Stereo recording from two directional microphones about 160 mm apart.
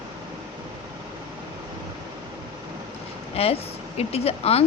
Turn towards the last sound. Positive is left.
turn(degrees=40)  # may be behind; listen again after turning